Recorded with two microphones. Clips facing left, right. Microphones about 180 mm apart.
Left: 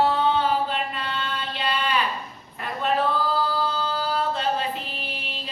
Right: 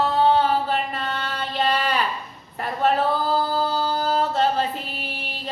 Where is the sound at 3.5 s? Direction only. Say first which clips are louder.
Right 3 dB; 40° right (ahead or behind).